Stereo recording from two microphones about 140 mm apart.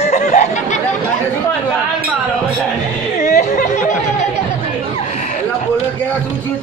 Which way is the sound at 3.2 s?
60° left (ahead or behind).